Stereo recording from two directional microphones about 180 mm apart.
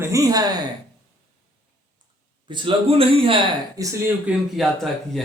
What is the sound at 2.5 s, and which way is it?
Speech, 25° right (ahead or behind).